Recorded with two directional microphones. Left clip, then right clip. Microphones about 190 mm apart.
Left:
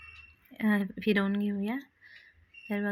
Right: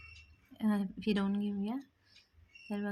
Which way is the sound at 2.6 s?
15° left (ahead or behind).